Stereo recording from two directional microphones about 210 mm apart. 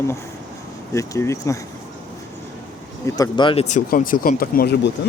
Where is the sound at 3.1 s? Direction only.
15° left (ahead or behind).